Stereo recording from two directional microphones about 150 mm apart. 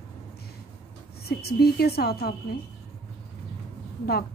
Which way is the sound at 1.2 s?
90° left.